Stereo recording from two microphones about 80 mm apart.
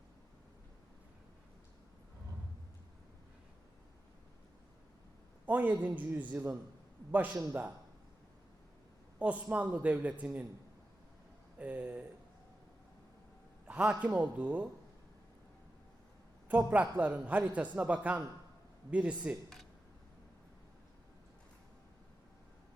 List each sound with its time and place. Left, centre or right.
5.5 s a man's voice: right
9.1 s a man's voice: centre
11.5 s a man's voice: centre
13.7 s a sound: right
14.0 s a man's voice: centre
16.5 s a man's voice: right